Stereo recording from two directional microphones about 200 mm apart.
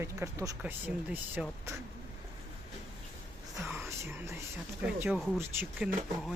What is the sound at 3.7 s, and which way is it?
Whispering, 10° right (ahead or behind).